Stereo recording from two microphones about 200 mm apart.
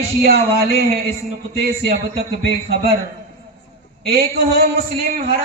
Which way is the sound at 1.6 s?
50° right (ahead or behind).